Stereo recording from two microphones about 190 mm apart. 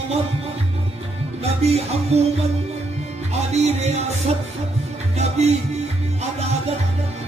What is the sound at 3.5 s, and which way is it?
Music, 35° right (ahead or behind).